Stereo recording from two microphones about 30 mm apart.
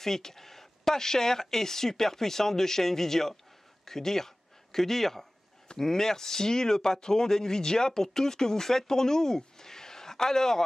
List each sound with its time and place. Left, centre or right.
0.0 s speech: centre